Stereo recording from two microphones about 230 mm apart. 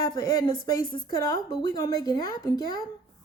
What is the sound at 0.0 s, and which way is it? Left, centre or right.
Speech, centre.